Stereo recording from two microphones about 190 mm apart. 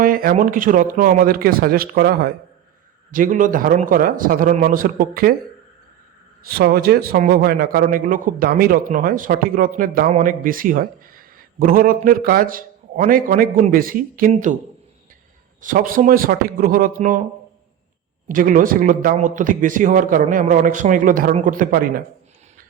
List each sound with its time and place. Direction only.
0.0 s a man's voice: 50° right (ahead or behind)
6.4 s a man's voice: 50° right (ahead or behind)
15.6 s a man's voice: 45° right (ahead or behind)
18.3 s a man's voice: 45° right (ahead or behind)